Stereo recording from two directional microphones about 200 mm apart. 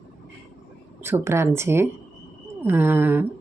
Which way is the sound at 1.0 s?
10° right (ahead or behind).